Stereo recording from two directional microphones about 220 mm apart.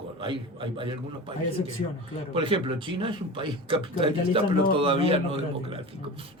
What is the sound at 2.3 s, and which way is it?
Speech, 25° right (ahead or behind).